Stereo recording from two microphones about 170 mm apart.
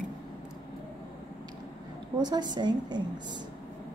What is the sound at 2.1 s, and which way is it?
Speech, 25° right (ahead or behind).